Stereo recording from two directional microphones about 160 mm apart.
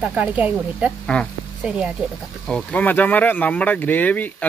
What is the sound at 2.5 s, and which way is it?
Speech, 5° left (ahead or behind).